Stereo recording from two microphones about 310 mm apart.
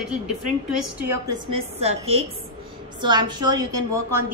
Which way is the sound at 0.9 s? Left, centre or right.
Centre.